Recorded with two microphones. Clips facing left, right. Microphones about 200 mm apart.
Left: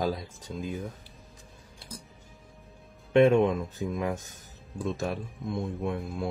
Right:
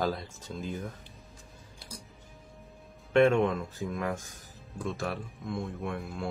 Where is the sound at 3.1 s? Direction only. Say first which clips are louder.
Left 3 dB; 20° left (ahead or behind).